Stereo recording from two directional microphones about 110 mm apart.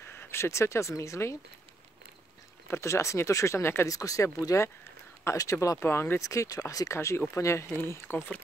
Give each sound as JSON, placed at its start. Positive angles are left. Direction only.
{"t": 0.0, "sound": "speech", "side_deg": 20}
{"t": 2.7, "sound": "speech", "side_deg": 25}